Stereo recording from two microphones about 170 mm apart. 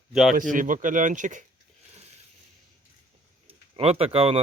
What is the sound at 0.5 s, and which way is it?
Speech, 50° right (ahead or behind).